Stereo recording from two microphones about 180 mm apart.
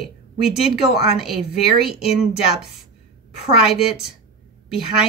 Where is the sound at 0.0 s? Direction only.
Centre (ahead or behind).